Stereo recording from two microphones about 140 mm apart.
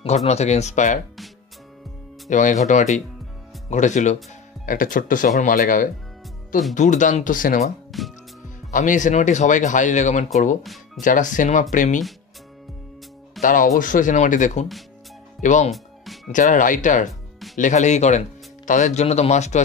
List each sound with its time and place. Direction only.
0.0 s speech: 50° left (ahead or behind)
2.2 s speech: 60° left (ahead or behind)
4.6 s speech: 70° left (ahead or behind)
6.7 s speech: 60° left (ahead or behind)
7.9 s music: centre (ahead or behind)
8.7 s speech: 65° left (ahead or behind)
13.4 s speech: 75° left (ahead or behind); by 19.6 s 55° left (ahead or behind)